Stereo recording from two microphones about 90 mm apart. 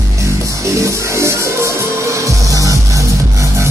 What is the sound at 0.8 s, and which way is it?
Music, 30° right (ahead or behind).